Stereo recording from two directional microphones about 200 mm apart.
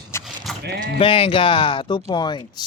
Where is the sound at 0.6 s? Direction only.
55° right (ahead or behind).